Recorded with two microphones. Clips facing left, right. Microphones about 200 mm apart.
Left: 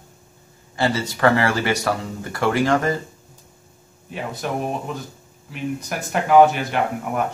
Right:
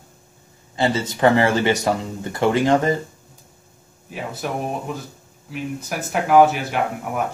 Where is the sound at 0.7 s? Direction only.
20° right (ahead or behind).